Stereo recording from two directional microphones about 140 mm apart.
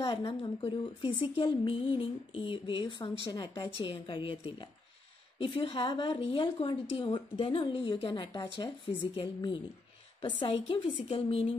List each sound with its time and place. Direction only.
0.4 s speech: 40° left (ahead or behind)